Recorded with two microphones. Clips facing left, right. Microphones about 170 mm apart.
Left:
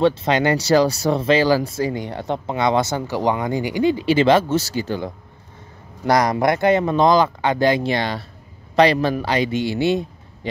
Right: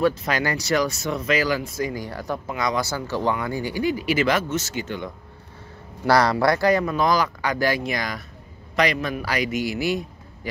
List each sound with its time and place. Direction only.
0.0 s speech: 25° left (ahead or behind)
6.0 s a man's voice: 20° left (ahead or behind)